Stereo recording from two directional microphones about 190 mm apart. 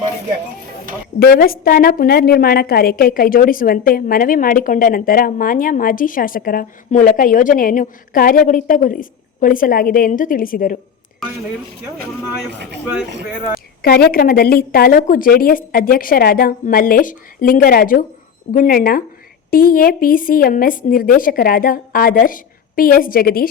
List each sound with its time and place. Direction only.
1.2 s a woman's voice: 50° left (ahead or behind)
13.8 s a woman's voice: 55° left (ahead or behind)